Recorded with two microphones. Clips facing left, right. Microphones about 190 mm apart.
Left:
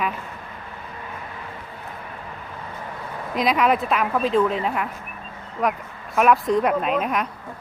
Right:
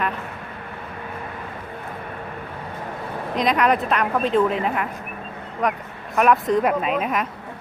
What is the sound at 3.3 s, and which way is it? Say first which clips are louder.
A woman's voice: even; 5° left (ahead or behind).